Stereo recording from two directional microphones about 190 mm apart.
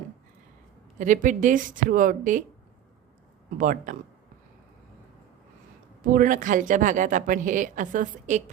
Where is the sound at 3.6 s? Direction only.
45° right (ahead or behind).